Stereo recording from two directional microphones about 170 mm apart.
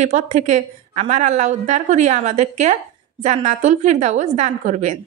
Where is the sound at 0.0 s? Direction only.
45° right (ahead or behind).